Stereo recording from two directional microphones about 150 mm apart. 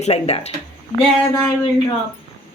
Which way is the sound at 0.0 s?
45° left (ahead or behind).